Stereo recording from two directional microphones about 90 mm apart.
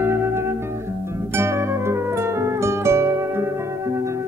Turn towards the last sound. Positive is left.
turn(degrees=-30)  # may be behind; listen again after turning